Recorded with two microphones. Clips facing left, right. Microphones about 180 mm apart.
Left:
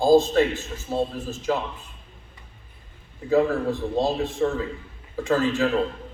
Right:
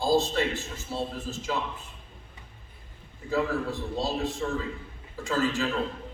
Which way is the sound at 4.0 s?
55° left (ahead or behind).